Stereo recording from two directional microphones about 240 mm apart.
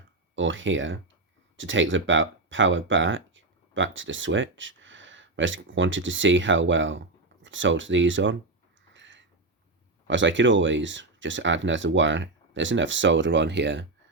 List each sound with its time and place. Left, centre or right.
0.3 s speech: right
8.9 s a sound: right
10.1 s speech: right